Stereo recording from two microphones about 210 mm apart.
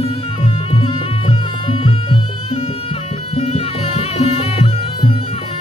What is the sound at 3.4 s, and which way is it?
Music, 30° left (ahead or behind).